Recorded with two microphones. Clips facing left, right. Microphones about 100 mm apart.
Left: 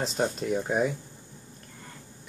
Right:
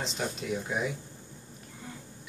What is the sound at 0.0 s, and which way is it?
Speech, 45° left (ahead or behind).